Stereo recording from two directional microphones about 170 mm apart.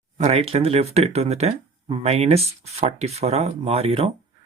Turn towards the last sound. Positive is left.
turn(degrees=-35)  # may be behind; listen again after turning